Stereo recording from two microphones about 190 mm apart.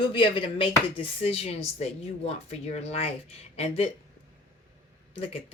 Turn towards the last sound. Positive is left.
turn(degrees=30)  # may be behind; listen again after turning